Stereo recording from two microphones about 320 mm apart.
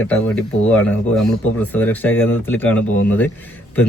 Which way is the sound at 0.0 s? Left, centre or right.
Centre.